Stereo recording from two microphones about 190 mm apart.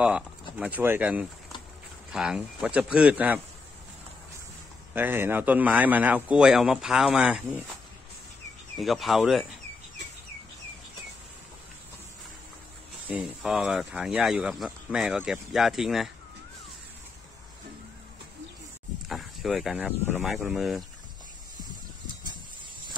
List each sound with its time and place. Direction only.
0.0 s a man's voice: 5° right (ahead or behind)
4.9 s a man's voice: 10° right (ahead or behind)
8.7 s speech: centre (ahead or behind)
13.0 s speech: 5° right (ahead or behind)
19.0 s speech: centre (ahead or behind)